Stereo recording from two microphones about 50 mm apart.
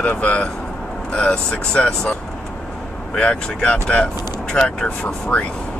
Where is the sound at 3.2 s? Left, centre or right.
Left.